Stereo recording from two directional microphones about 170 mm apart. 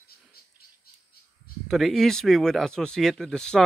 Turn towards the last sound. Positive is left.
turn(degrees=5)  # may be behind; listen again after turning